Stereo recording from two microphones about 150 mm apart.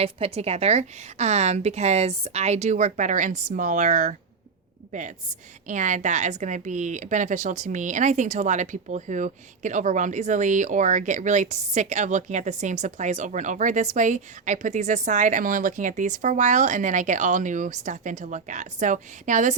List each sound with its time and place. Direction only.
0.0 s a woman's voice: 40° right (ahead or behind)